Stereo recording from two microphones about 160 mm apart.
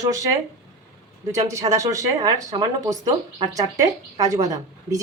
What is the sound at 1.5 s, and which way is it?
Speech, 20° right (ahead or behind).